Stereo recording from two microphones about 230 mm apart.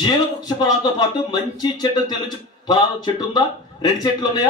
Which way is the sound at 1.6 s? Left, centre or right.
Centre.